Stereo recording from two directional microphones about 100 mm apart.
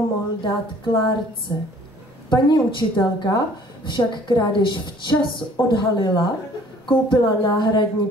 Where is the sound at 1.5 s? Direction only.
35° left (ahead or behind).